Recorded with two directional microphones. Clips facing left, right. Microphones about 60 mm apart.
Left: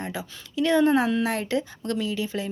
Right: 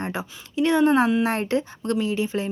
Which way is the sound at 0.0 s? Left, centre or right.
Right.